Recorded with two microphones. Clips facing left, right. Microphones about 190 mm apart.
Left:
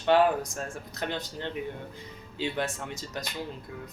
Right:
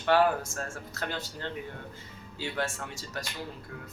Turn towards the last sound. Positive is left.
turn(degrees=20)  # may be behind; listen again after turning